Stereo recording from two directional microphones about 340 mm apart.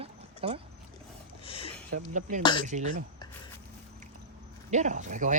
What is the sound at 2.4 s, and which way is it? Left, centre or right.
Speech, centre.